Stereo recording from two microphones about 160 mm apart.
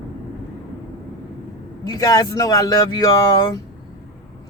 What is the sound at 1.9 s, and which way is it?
Speech, 20° left (ahead or behind).